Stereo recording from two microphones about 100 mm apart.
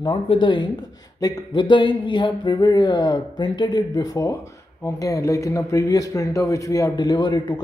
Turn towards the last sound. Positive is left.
turn(degrees=45)  # may be behind; listen again after turning